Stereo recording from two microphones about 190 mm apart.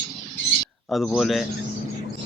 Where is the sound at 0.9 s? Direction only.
5° left (ahead or behind).